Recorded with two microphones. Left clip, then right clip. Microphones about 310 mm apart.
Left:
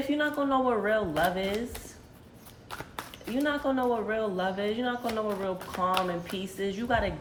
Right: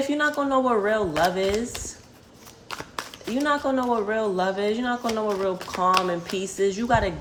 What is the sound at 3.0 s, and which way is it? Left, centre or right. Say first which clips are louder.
Speech: right 4 dB; centre.